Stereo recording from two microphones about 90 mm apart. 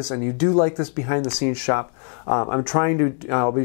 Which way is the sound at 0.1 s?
20° left (ahead or behind).